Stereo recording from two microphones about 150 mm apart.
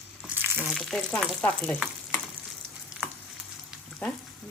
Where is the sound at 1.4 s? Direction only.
10° left (ahead or behind).